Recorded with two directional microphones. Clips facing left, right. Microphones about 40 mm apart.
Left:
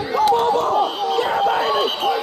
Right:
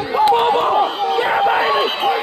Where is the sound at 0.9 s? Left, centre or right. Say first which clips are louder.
Right 2 dB; centre.